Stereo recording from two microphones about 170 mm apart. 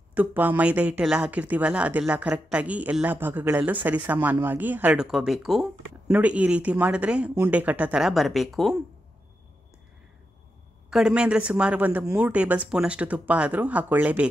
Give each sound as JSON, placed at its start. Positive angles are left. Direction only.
{"t": 0.1, "sound": "speech", "side_deg": -10}
{"t": 10.9, "sound": "speech", "side_deg": -5}